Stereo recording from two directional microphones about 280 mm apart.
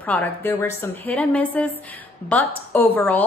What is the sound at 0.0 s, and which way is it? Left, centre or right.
A woman's voice, centre.